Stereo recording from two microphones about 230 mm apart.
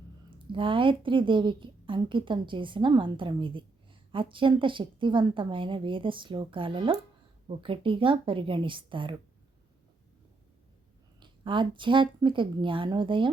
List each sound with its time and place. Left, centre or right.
0.3 s a woman's voice: right
11.2 s a woman's voice: right